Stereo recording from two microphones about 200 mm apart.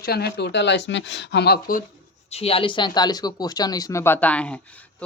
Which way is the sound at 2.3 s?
30° left (ahead or behind).